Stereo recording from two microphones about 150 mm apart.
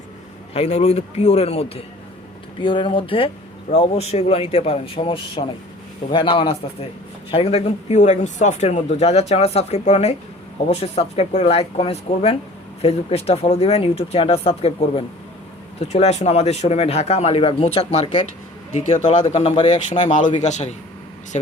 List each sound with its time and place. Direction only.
0.5 s speech: 45° left (ahead or behind)